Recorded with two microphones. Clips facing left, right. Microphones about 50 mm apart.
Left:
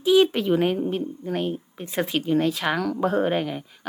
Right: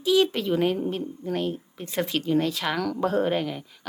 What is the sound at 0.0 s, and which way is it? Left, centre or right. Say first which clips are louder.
A woman's voice: left 3 dB; centre.